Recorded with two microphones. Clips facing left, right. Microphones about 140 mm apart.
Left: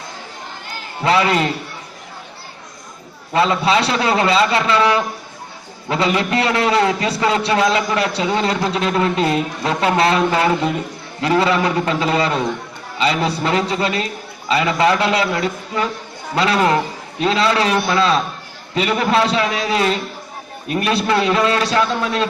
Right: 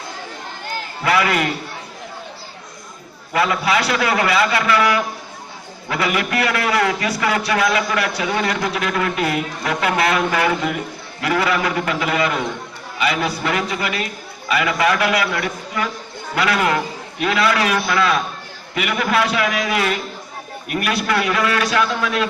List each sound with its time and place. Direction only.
1.0 s a man's voice: 25° left (ahead or behind)
3.3 s a man's voice: 25° left (ahead or behind)